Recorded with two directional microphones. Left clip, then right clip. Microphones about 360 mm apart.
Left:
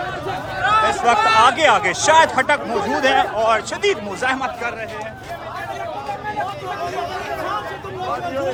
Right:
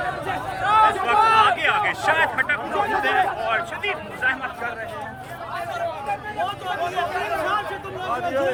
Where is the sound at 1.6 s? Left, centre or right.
Centre.